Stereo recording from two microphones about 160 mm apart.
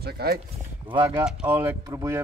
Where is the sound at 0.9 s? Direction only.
25° right (ahead or behind).